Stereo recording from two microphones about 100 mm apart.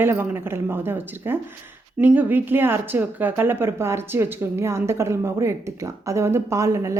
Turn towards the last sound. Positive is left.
turn(degrees=-30)  # may be behind; listen again after turning